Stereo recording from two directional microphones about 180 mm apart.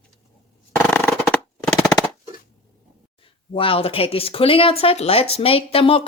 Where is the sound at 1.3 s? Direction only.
5° left (ahead or behind).